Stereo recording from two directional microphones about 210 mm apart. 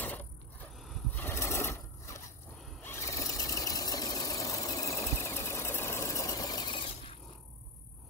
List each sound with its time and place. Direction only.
0.0 s vehicle: 10° left (ahead or behind)
0.7 s a sound: 5° left (ahead or behind)
2.6 s vehicle: 10° left (ahead or behind)